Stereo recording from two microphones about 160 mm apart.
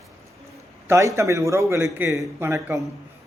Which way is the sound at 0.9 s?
15° right (ahead or behind).